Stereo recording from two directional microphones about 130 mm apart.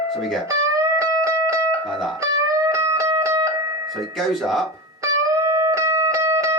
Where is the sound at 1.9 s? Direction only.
Centre (ahead or behind).